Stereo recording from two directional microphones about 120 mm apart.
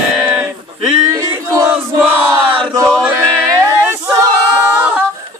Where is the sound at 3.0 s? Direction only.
20° right (ahead or behind).